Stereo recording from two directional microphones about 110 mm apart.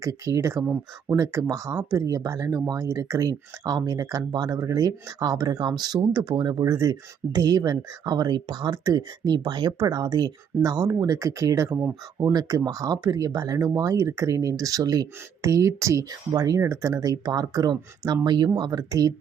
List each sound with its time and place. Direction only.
0.0 s speech: 30° right (ahead or behind)